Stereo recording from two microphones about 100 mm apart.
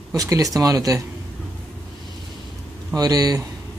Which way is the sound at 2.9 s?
40° right (ahead or behind).